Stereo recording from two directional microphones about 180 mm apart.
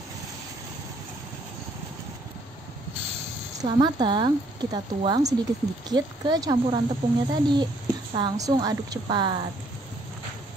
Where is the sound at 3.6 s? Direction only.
25° right (ahead or behind).